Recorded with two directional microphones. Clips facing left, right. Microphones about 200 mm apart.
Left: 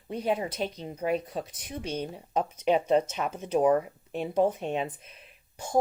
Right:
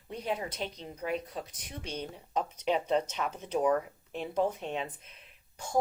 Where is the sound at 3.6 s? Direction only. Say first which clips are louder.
Left 5 dB; 25° left (ahead or behind).